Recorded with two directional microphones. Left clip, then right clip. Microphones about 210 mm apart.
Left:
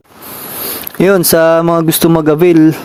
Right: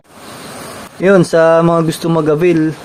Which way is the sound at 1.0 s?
55° left (ahead or behind).